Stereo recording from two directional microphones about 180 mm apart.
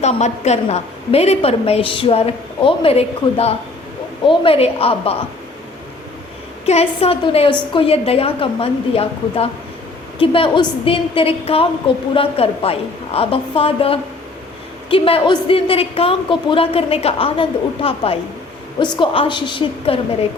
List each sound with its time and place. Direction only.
0.0 s a woman's voice: 40° left (ahead or behind)
6.7 s a woman's voice: 35° left (ahead or behind)